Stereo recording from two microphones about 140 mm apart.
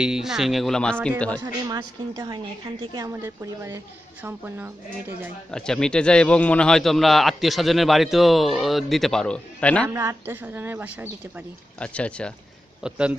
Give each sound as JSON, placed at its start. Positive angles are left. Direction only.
{"t": 0.0, "sound": "a man's voice", "side_deg": -5}
{"t": 1.4, "sound": "a woman's voice", "side_deg": -30}
{"t": 3.1, "sound": "a woman's voice", "side_deg": -20}
{"t": 5.5, "sound": "a man's voice", "side_deg": 5}
{"t": 9.8, "sound": "a woman's voice", "side_deg": -15}
{"t": 11.8, "sound": "speech", "side_deg": 10}
{"t": 12.8, "sound": "a woman's voice", "side_deg": -5}